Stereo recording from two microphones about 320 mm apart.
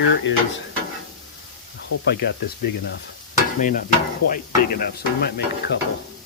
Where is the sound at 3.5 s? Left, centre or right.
Left.